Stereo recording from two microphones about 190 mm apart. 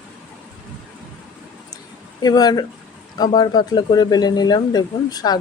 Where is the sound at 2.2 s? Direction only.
20° left (ahead or behind).